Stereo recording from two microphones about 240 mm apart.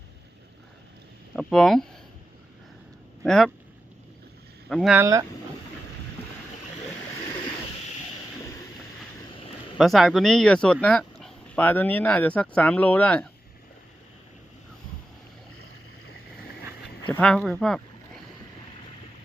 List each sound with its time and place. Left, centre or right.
1.4 s speech: centre
3.2 s speech: centre
4.7 s speech: centre
9.3 s a sound: left
9.7 s speech: centre
17.1 s speech: centre